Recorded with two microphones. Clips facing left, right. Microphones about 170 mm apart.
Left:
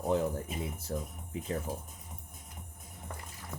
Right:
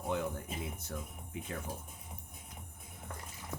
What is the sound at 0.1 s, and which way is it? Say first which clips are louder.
Speech: left 5 dB; 35° left (ahead or behind).